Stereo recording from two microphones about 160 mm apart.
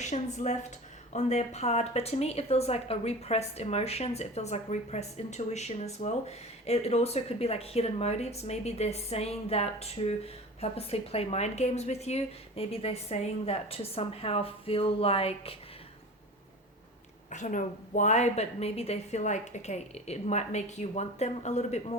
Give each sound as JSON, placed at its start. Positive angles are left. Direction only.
{"t": 0.0, "sound": "a woman's voice", "side_deg": 45}
{"t": 17.3, "sound": "a woman's voice", "side_deg": 55}